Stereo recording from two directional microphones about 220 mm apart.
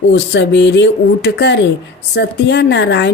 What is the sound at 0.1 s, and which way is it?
A woman's voice, 55° left (ahead or behind).